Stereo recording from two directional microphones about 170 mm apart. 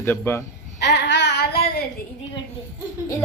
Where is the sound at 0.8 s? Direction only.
90° left; by 1.8 s 65° left (ahead or behind).